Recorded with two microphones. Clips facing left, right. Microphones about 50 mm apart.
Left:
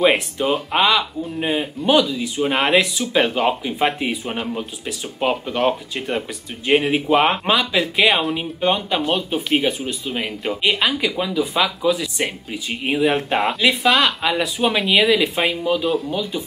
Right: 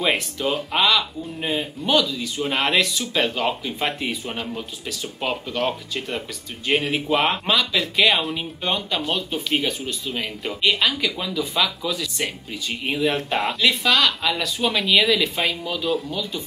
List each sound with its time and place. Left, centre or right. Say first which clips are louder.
0.0 s speech: left 5 dB; centre